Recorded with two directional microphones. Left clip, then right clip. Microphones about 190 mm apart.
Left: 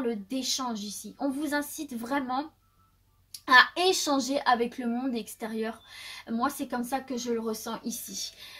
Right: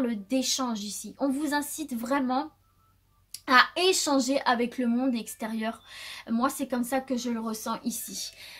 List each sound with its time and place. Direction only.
0.0 s a woman's voice: 40° right (ahead or behind)
3.4 s a woman's voice: 35° right (ahead or behind)